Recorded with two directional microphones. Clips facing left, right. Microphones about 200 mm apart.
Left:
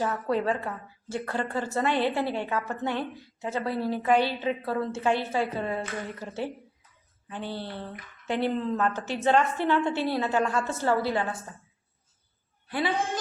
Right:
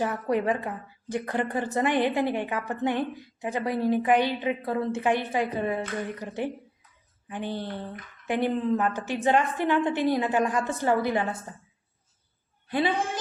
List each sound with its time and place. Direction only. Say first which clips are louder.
0.0 s a woman's voice: right 1 dB; 15° right (ahead or behind)